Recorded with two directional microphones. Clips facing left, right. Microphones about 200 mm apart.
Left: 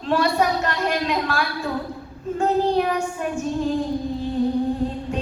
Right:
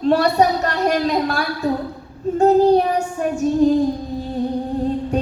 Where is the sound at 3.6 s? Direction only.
40° right (ahead or behind).